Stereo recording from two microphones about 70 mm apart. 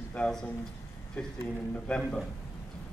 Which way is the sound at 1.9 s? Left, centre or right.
Centre.